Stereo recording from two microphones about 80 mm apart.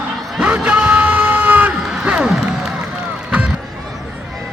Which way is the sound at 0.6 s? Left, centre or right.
Centre.